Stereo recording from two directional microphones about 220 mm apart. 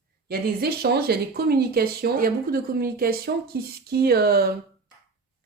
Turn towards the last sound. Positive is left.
turn(degrees=-45)  # may be behind; listen again after turning